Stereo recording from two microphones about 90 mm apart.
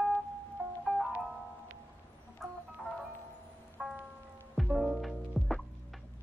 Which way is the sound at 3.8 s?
10° right (ahead or behind).